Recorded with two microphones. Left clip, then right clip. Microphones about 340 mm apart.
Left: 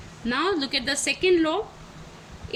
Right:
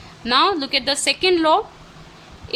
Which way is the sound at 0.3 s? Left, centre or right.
Centre.